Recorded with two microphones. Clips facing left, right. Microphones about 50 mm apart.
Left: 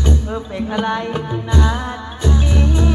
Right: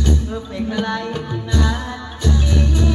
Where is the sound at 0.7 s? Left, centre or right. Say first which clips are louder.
Left 4 dB; left.